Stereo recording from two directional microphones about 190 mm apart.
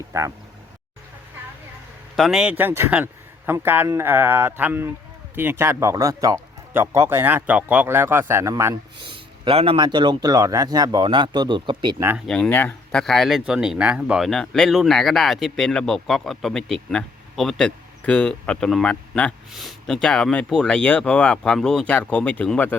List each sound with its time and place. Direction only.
0.1 s speech: 15° right (ahead or behind)
2.1 s speech: centre (ahead or behind)
9.0 s speech: 25° right (ahead or behind)
12.3 s speech: 5° left (ahead or behind)